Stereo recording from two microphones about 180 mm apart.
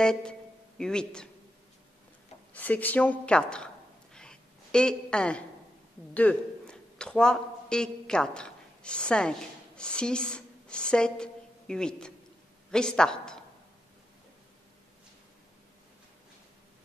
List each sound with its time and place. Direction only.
0.0 s speech: 5° left (ahead or behind)
2.5 s a sound: 10° left (ahead or behind)
6.1 s speech: 5° left (ahead or behind)